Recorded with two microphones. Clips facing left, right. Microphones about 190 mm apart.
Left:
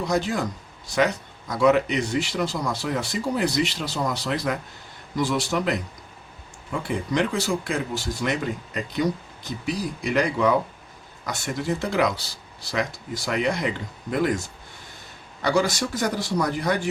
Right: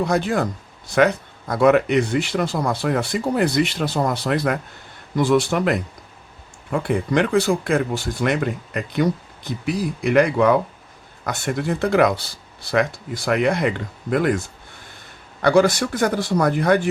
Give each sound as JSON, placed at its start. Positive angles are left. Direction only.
{"t": 0.0, "sound": "speech", "side_deg": -55}